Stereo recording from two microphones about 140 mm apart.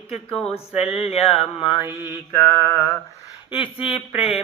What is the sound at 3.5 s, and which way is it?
Mantra, 40° left (ahead or behind).